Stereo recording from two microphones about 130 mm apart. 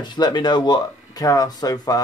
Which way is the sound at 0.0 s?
35° left (ahead or behind).